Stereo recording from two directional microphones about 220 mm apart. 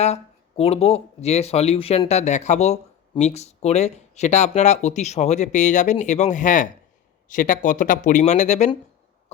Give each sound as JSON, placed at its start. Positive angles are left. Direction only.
{"t": 0.0, "sound": "speech", "side_deg": 30}